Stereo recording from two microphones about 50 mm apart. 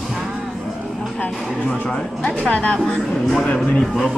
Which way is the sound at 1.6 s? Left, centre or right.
Centre.